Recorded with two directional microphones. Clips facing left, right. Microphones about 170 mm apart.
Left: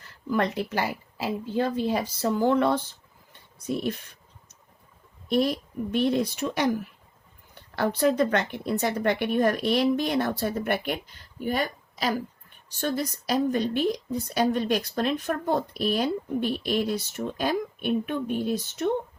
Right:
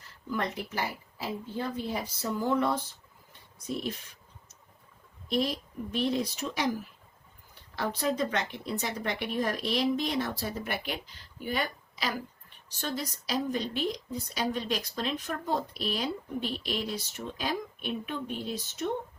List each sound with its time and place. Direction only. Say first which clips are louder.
0.3 s speech: left 7 dB; 75° left (ahead or behind)
5.3 s speech: left 6 dB; 55° left (ahead or behind)